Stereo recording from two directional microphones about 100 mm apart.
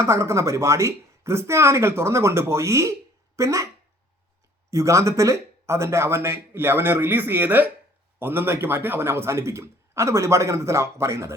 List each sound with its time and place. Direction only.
0.0 s a man's voice: 30° right (ahead or behind)
4.7 s a man's voice: 30° right (ahead or behind)